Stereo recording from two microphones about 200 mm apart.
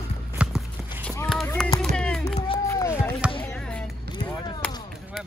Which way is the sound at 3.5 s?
5° left (ahead or behind).